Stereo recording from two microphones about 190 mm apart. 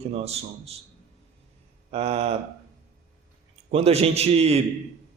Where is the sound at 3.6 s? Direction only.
35° right (ahead or behind).